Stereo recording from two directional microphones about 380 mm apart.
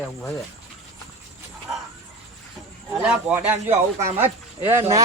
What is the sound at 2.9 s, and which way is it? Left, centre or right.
A man's voice, centre.